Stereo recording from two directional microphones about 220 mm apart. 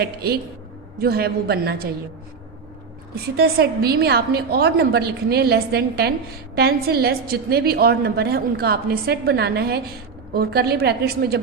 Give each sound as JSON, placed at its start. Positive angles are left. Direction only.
{"t": 0.0, "sound": "a woman's voice", "side_deg": -45}
{"t": 3.2, "sound": "a woman's voice", "side_deg": -45}